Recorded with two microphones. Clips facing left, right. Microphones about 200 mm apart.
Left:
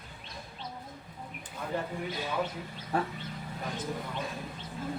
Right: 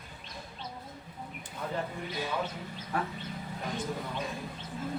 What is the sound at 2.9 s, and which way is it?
Speech, 30° left (ahead or behind).